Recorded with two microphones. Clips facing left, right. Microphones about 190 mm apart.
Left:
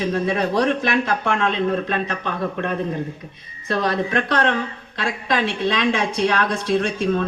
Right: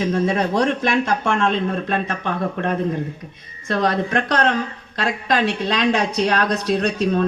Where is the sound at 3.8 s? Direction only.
50° right (ahead or behind).